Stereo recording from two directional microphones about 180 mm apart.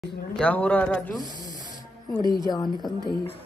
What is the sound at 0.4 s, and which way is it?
Speech, 10° left (ahead or behind).